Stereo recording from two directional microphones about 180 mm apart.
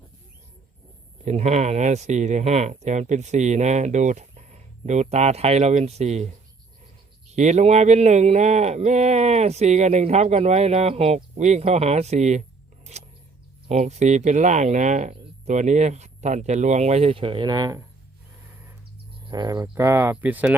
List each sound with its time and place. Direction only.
1.2 s speech: 40° right (ahead or behind)
7.3 s speech: 40° right (ahead or behind); by 17.8 s 20° right (ahead or behind)
19.2 s speech: 25° right (ahead or behind)